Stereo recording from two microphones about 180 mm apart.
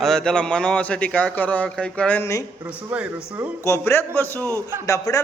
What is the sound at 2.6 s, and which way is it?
Speech, 10° right (ahead or behind).